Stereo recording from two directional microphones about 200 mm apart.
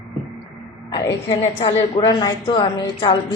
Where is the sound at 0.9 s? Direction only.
20° left (ahead or behind).